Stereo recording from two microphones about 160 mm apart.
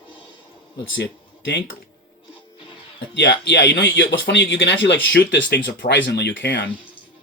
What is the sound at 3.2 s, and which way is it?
Speech, 90° left.